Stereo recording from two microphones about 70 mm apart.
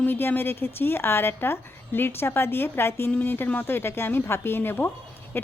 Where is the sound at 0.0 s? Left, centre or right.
Left.